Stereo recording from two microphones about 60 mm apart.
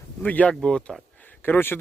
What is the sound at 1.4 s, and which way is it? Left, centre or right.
Speech, left.